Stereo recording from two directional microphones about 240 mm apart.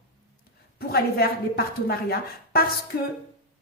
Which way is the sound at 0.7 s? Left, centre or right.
Left.